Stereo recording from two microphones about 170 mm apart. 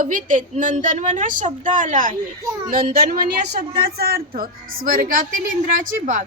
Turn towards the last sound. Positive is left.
turn(degrees=-50)  # may be behind; listen again after turning